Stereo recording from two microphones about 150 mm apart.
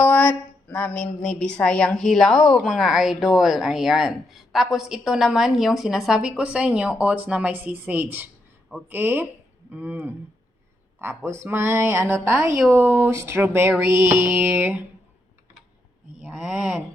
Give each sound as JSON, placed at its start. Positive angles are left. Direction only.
{"t": 0.0, "sound": "a woman's voice", "side_deg": 10}
{"t": 8.9, "sound": "music", "side_deg": -15}
{"t": 11.2, "sound": "music", "side_deg": -15}
{"t": 16.2, "sound": "speech", "side_deg": -5}